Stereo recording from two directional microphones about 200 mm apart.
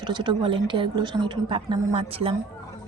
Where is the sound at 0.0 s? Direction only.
20° right (ahead or behind).